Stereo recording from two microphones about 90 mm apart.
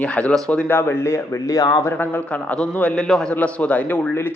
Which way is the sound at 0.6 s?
25° left (ahead or behind).